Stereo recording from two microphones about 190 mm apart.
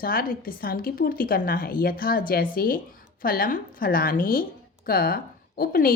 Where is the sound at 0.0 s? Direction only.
50° left (ahead or behind).